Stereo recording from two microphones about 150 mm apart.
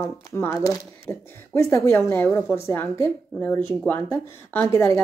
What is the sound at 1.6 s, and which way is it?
A woman's voice, 20° left (ahead or behind).